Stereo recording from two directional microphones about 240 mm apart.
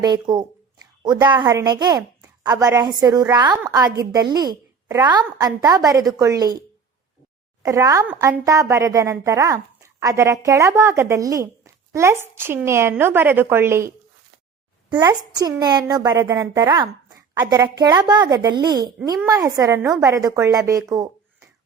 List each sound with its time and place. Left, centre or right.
0.0 s a woman's voice: centre
7.6 s a woman's voice: centre